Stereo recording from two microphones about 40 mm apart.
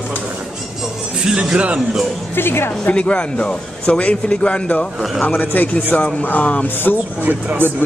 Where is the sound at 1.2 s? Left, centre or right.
Centre.